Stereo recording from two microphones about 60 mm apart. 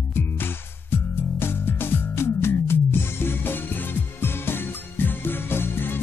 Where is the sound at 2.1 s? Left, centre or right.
Left.